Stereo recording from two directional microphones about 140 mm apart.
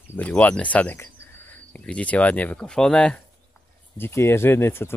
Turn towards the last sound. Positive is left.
turn(degrees=15)  # may be behind; listen again after turning